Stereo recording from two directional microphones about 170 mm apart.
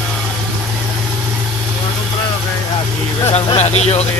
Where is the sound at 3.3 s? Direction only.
40° left (ahead or behind).